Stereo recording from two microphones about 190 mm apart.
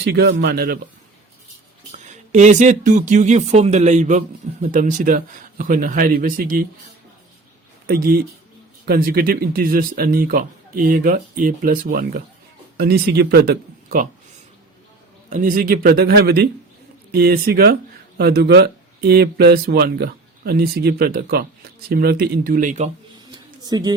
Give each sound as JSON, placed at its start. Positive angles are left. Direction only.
{"t": 0.0, "sound": "speech", "side_deg": -60}
{"t": 1.9, "sound": "speech", "side_deg": -40}
{"t": 7.9, "sound": "speech", "side_deg": -50}
{"t": 15.3, "sound": "speech", "side_deg": -45}
{"t": 23.3, "sound": "a sound", "side_deg": -20}